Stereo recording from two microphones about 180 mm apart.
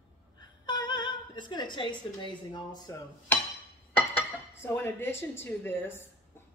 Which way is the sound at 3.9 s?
10° left (ahead or behind).